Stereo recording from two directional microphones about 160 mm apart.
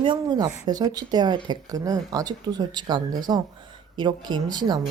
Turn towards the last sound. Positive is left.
turn(degrees=-25)  # may be behind; listen again after turning